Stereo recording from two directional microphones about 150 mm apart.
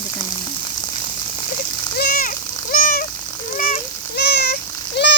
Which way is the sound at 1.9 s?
85° left.